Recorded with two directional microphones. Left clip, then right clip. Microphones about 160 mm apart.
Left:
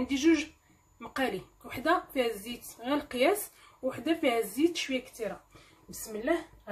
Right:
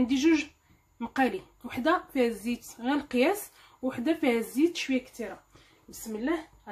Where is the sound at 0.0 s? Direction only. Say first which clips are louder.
Right 2 dB; 55° right (ahead or behind).